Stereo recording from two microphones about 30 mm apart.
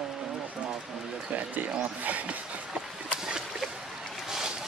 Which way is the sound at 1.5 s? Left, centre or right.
Right.